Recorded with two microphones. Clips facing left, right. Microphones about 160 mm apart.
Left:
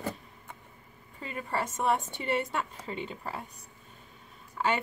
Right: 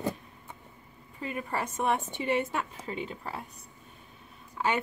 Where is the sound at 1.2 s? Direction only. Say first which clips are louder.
Even; 10° right (ahead or behind).